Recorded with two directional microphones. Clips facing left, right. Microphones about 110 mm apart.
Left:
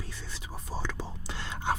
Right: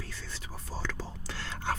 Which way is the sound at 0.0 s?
20° left (ahead or behind).